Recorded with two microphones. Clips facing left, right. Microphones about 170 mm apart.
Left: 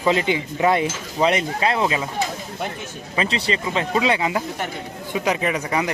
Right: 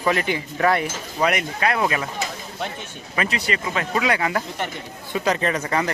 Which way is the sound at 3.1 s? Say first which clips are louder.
Left 2 dB; 25° left (ahead or behind).